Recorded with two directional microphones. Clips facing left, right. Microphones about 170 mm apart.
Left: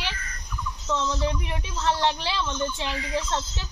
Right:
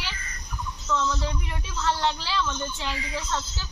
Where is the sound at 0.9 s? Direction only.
25° left (ahead or behind).